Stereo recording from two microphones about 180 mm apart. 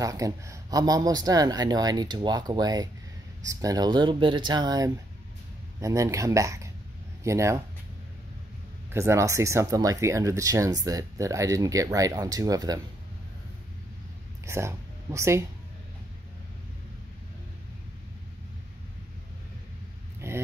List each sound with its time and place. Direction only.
0.0 s speech: 20° right (ahead or behind)
8.9 s speech: 15° right (ahead or behind)
14.4 s speech: 15° right (ahead or behind)
20.2 s a sound: 15° right (ahead or behind)